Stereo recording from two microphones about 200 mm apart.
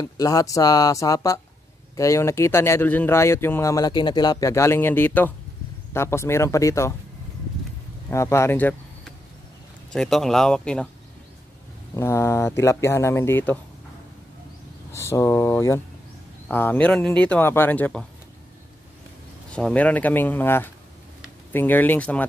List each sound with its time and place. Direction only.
0.0 s speech: 15° left (ahead or behind)
8.1 s speech: 15° left (ahead or behind)
9.9 s speech: centre (ahead or behind)
11.9 s speech: 15° left (ahead or behind)
14.9 s speech: 15° left (ahead or behind)
19.5 s speech: 5° left (ahead or behind)